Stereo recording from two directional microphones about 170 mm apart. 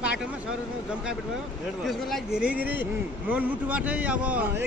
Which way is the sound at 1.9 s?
Centre (ahead or behind).